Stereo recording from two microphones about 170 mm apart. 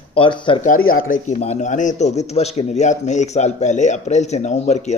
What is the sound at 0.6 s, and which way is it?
A man's voice, 55° left (ahead or behind).